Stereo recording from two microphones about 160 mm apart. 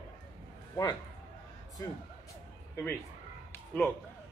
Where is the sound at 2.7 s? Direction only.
10° left (ahead or behind).